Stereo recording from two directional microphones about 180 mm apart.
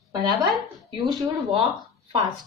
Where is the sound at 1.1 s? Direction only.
30° right (ahead or behind).